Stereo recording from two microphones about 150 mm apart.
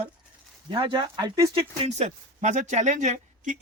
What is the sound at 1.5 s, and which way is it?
Speech, 45° right (ahead or behind).